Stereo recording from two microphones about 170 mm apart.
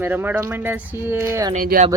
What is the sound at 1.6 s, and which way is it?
Speech, 50° right (ahead or behind).